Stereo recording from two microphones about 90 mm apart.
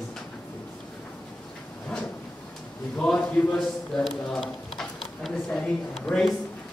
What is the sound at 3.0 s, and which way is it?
Speech, 10° left (ahead or behind).